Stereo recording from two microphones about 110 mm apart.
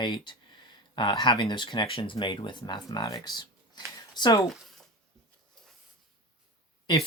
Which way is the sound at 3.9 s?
40° left (ahead or behind).